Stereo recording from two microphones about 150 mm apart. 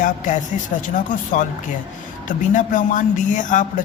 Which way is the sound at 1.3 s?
60° left (ahead or behind).